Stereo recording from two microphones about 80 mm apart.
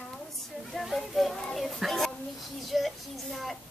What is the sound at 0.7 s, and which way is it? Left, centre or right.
A child's voice, centre.